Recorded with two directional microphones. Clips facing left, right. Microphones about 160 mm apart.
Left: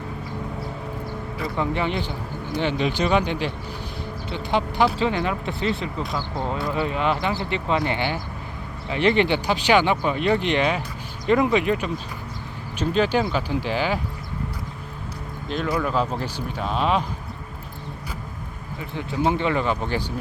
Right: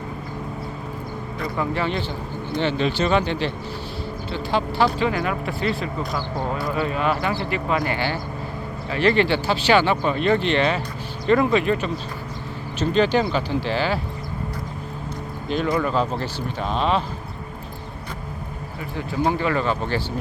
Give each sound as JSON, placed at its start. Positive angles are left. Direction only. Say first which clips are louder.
{"t": 1.5, "sound": "speech", "louder": "even", "side_deg": 20}
{"t": 15.4, "sound": "speech", "louder": "right 2 dB", "side_deg": 0}
{"t": 19.3, "sound": "speech", "louder": "even", "side_deg": 20}